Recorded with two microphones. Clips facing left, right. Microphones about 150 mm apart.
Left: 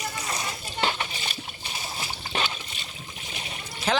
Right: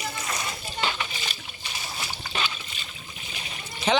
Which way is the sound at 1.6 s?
35° left (ahead or behind).